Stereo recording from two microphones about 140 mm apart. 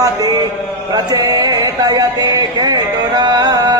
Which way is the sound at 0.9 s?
25° right (ahead or behind).